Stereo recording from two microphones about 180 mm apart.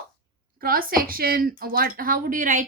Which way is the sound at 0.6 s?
55° right (ahead or behind).